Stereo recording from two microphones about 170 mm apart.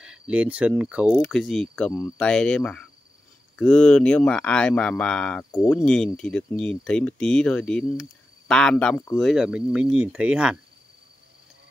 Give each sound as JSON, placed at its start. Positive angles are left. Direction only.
{"t": 0.0, "sound": "speech", "side_deg": -5}
{"t": 5.5, "sound": "speech", "side_deg": 15}
{"t": 5.8, "sound": "speech", "side_deg": 5}